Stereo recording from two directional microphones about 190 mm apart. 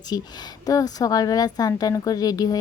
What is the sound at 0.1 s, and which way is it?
Speech, 20° left (ahead or behind).